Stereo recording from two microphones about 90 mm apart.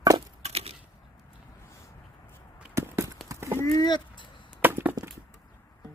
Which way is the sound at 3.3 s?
30° right (ahead or behind).